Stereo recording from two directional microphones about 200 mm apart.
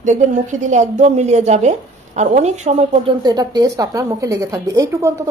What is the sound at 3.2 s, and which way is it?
A woman's voice, 20° right (ahead or behind).